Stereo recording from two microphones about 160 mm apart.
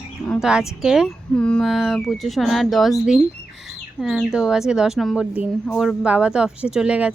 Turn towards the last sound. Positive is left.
turn(degrees=-5)  # may be behind; listen again after turning